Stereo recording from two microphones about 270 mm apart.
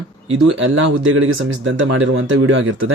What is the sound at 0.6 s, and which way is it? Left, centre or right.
Speech, right.